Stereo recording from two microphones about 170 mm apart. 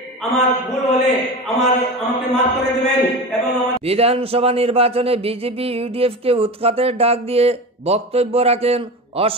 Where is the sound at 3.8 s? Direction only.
35° right (ahead or behind).